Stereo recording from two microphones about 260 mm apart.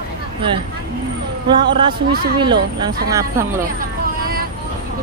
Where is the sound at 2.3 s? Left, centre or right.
Centre.